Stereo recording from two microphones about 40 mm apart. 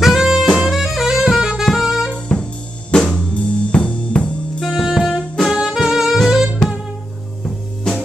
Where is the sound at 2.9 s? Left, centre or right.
Left.